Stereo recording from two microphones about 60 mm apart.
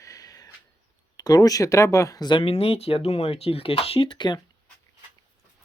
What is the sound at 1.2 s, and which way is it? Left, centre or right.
Speech, left.